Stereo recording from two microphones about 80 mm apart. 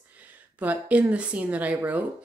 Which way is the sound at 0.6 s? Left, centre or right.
Centre.